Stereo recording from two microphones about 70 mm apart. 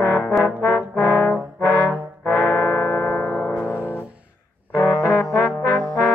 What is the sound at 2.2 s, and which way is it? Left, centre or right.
Brass instrument, left.